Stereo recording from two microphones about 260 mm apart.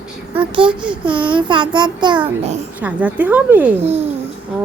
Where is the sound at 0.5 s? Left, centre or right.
Centre.